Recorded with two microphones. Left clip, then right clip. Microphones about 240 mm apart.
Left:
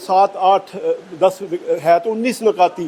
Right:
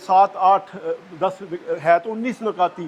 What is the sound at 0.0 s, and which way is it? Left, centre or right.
Speech, right.